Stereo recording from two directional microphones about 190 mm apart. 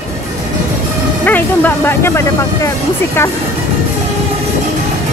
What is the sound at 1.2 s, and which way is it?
Speech, 10° left (ahead or behind).